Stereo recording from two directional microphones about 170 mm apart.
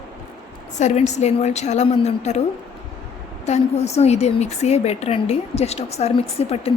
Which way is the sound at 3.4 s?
40° left (ahead or behind).